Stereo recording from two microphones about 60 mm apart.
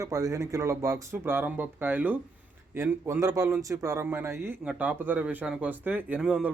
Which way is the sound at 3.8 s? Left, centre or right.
Right.